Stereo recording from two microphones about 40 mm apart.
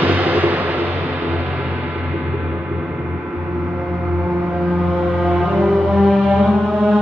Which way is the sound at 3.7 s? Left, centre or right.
Right.